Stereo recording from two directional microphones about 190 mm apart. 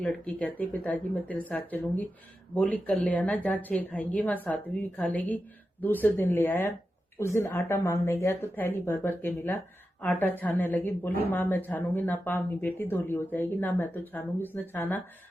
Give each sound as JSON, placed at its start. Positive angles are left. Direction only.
{"t": 0.0, "sound": "speech", "side_deg": 10}